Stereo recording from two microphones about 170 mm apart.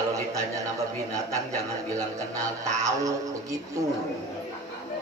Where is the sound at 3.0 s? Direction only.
20° right (ahead or behind).